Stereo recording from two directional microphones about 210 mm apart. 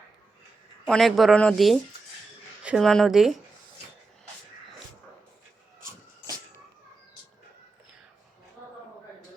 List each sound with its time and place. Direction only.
0.9 s speech: centre (ahead or behind)